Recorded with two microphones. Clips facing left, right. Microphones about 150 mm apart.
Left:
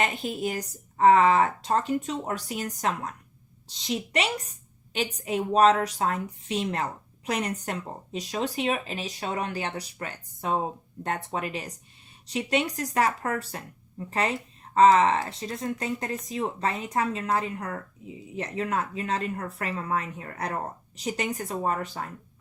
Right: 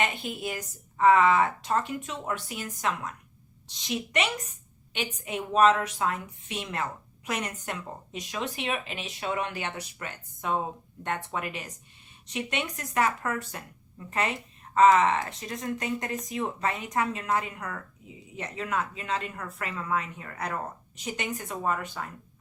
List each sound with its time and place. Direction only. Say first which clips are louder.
0.0 s speech: left 3 dB; 40° left (ahead or behind)